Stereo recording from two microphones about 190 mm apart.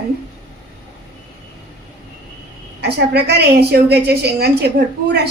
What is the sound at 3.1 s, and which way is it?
A woman's voice, 60° right (ahead or behind).